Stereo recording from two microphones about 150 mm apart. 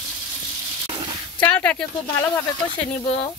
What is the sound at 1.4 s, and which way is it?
Speech, 10° left (ahead or behind).